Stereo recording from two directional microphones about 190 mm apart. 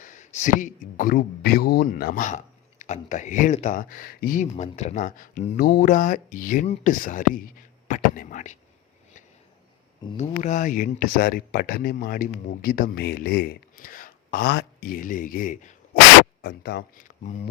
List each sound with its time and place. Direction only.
0.0 s speech: 40° left (ahead or behind)
10.2 s speech: 40° left (ahead or behind)
16.4 s speech: 55° left (ahead or behind)
17.2 s speech: 35° left (ahead or behind)